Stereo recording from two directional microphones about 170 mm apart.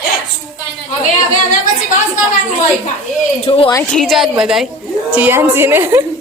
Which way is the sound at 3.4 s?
35° left (ahead or behind).